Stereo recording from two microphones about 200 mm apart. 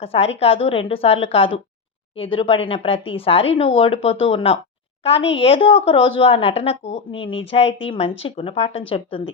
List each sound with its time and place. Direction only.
0.0 s speech: 30° left (ahead or behind)